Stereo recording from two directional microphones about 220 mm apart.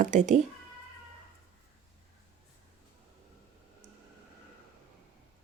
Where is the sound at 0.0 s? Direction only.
35° right (ahead or behind).